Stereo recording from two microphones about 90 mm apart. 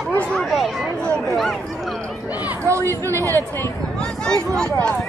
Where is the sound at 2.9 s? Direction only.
25° left (ahead or behind).